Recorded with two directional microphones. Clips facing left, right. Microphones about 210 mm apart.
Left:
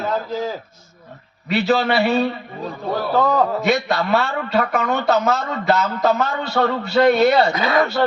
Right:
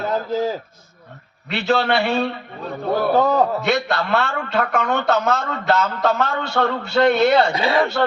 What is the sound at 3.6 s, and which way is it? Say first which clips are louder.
A man's voice: left 2 dB; 5° left (ahead or behind).